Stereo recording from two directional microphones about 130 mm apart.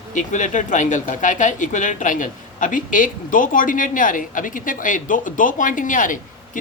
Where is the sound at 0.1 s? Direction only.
80° left.